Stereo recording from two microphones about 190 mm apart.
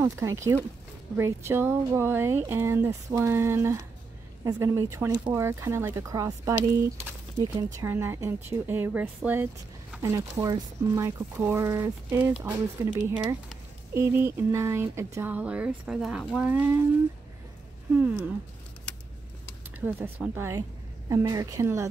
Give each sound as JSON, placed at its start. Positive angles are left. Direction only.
{"t": 0.0, "sound": "speech", "side_deg": -15}
{"t": 17.9, "sound": "speech", "side_deg": -10}
{"t": 19.8, "sound": "speech", "side_deg": -10}